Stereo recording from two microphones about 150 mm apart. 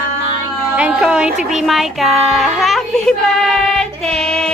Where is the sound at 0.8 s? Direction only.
5° right (ahead or behind).